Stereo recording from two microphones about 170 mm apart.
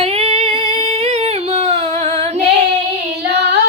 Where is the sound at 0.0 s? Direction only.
35° right (ahead or behind).